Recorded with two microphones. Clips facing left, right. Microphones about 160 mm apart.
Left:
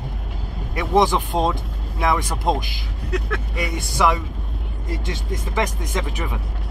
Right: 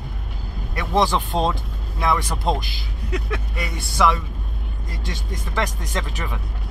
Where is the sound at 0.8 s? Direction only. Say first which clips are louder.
Left 2 dB; 15° left (ahead or behind).